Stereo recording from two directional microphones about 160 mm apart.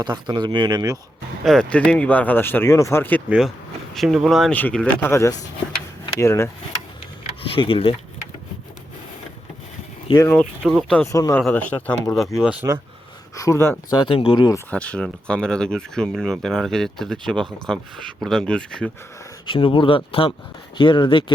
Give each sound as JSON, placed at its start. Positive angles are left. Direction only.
{"t": 0.0, "sound": "speech", "side_deg": -25}
{"t": 1.5, "sound": "speech", "side_deg": 5}
{"t": 3.2, "sound": "speech", "side_deg": -5}
{"t": 7.4, "sound": "speech", "side_deg": 35}
{"t": 10.2, "sound": "speech", "side_deg": 5}
{"t": 11.0, "sound": "speech", "side_deg": 20}
{"t": 11.7, "sound": "speech", "side_deg": 5}
{"t": 13.3, "sound": "speech", "side_deg": 20}
{"t": 13.9, "sound": "speech", "side_deg": 30}
{"t": 14.7, "sound": "speech", "side_deg": 10}
{"t": 19.5, "sound": "speech", "side_deg": 30}